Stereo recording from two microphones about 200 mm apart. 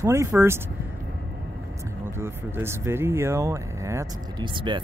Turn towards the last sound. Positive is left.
turn(degrees=-25)  # may be behind; listen again after turning